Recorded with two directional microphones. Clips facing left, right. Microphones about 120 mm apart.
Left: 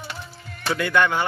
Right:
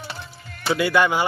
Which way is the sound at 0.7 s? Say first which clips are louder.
Right 2 dB; 5° right (ahead or behind).